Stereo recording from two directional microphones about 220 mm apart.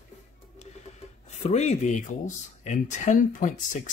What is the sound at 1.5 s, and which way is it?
Speech, 30° left (ahead or behind).